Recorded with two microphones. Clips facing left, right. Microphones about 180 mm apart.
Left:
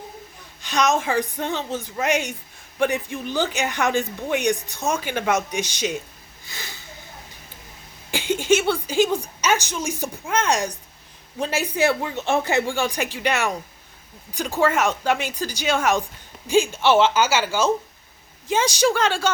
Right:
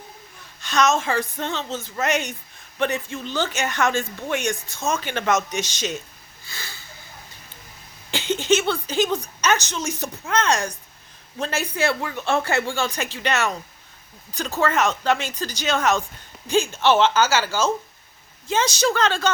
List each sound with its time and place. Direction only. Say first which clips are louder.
0.6 s a woman's voice: right 1 dB; 15° left (ahead or behind)
6.4 s a sound: left 1 dB; 20° left (ahead or behind)
8.1 s a woman's voice: left 1 dB; 10° left (ahead or behind)